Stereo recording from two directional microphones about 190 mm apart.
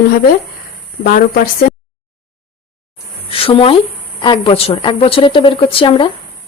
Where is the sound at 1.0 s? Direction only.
50° left (ahead or behind).